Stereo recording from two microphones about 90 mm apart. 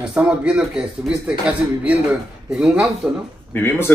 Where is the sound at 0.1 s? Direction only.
10° right (ahead or behind).